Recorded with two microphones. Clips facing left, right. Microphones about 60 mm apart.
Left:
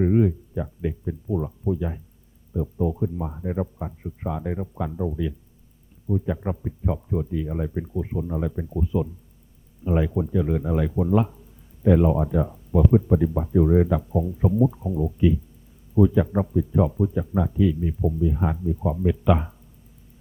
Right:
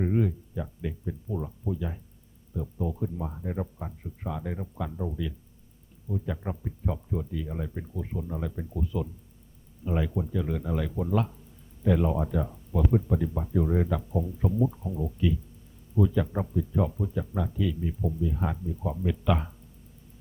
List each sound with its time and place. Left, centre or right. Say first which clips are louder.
0.0 s speech: left 7 dB; centre